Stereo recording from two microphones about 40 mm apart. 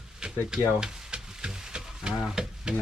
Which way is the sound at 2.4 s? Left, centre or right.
Centre.